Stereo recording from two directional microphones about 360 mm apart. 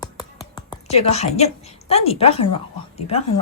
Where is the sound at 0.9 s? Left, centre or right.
Centre.